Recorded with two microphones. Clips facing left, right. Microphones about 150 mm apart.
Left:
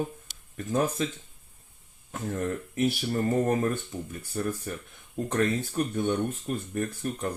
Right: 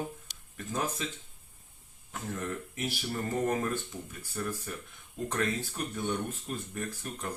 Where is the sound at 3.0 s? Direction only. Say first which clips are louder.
Left 6 dB; 40° left (ahead or behind).